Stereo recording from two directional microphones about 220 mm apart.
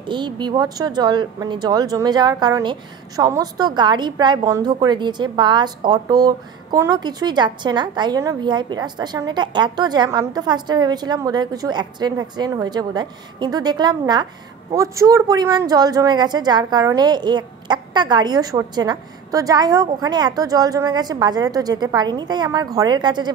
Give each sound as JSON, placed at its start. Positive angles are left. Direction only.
{"t": 0.0, "sound": "speech", "side_deg": -20}